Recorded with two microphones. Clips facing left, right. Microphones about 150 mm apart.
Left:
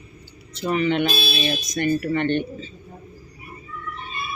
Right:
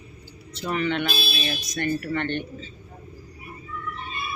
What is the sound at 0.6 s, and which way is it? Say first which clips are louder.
Speech: left 5 dB; 15° left (ahead or behind).